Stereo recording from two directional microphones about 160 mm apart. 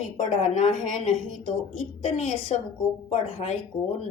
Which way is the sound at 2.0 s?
45° left (ahead or behind).